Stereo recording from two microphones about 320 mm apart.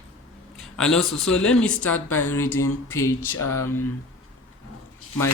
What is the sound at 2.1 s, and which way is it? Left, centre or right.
Speech, left.